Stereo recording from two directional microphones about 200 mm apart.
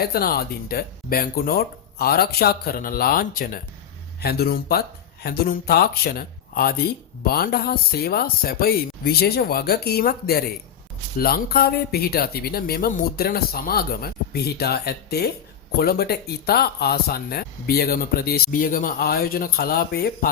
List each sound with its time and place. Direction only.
0.0 s speech: 50° left (ahead or behind)